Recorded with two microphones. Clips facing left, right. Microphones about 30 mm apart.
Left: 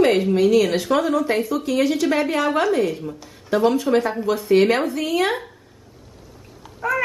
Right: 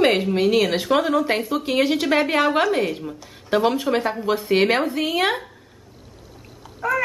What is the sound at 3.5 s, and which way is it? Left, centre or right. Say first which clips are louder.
Speech: left 1 dB; right.